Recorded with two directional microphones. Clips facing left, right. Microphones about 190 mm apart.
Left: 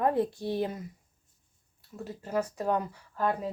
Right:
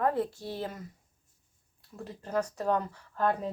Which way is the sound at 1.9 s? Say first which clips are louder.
Left 1 dB; 5° left (ahead or behind).